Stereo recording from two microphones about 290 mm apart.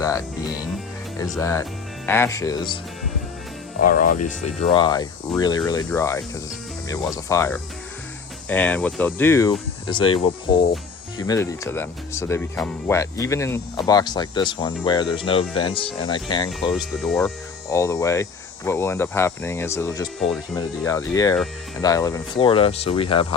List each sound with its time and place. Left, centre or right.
1.4 s speech: centre
3.8 s speech: left
11.3 s speech: centre
16.7 s speech: centre